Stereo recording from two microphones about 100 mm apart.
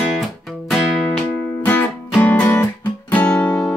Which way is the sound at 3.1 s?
10° left (ahead or behind).